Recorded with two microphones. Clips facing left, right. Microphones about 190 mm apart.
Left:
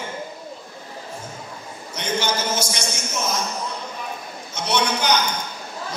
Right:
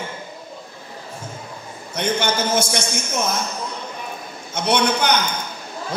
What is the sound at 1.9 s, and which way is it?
Speech, 55° right (ahead or behind).